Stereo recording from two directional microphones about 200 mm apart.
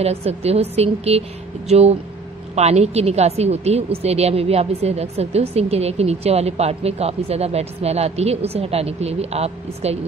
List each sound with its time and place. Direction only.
0.0 s a woman's voice: 30° right (ahead or behind)